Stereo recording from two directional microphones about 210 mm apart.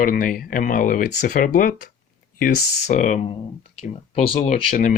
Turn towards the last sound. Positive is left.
turn(degrees=35)  # may be behind; listen again after turning